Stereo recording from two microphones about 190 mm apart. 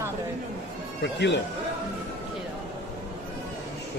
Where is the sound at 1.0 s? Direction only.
65° left (ahead or behind).